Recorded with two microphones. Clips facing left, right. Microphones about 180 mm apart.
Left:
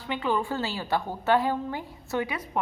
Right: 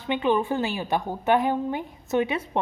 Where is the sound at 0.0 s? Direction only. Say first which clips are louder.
Right 5 dB; 20° right (ahead or behind).